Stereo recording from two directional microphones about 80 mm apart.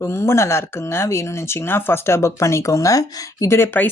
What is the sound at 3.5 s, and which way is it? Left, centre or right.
Speech, left.